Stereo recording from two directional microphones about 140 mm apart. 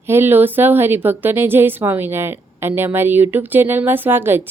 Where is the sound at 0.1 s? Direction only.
15° right (ahead or behind).